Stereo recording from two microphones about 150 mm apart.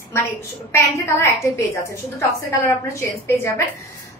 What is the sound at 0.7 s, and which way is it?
A woman's voice, 20° left (ahead or behind).